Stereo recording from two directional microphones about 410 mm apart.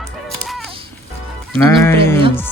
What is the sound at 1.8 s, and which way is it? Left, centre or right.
Speech, centre.